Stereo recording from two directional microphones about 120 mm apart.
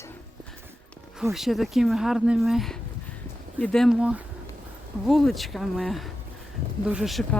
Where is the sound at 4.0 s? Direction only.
10° right (ahead or behind).